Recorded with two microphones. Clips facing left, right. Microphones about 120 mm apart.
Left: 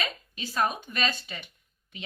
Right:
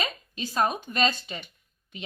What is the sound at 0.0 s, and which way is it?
Speech, 30° right (ahead or behind).